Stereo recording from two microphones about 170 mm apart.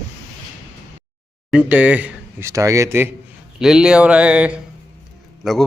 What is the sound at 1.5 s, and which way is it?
Speech, 10° right (ahead or behind).